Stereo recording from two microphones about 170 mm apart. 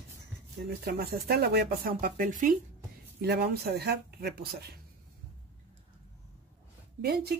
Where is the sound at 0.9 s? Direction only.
70° right (ahead or behind); by 2.5 s 50° right (ahead or behind).